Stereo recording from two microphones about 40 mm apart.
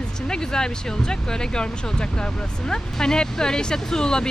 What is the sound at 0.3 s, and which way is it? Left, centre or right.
Speech, centre.